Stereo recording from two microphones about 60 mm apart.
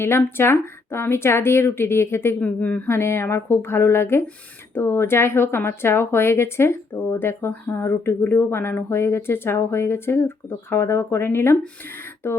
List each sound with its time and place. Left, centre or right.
0.0 s speech: left
2.4 s speech: left
2.8 s speech: left